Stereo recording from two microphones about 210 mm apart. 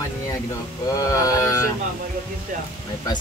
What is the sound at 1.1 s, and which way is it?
Speech, 15° left (ahead or behind).